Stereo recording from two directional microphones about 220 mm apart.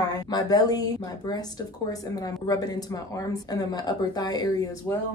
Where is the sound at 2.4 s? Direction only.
15° left (ahead or behind).